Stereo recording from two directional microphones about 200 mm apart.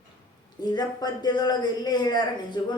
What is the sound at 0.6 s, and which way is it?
A man's voice, 20° left (ahead or behind).